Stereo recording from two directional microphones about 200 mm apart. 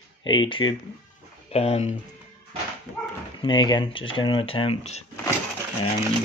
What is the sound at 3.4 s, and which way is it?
Speech, 25° left (ahead or behind).